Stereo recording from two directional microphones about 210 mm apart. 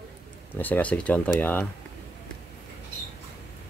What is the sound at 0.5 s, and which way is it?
Speech, 10° left (ahead or behind).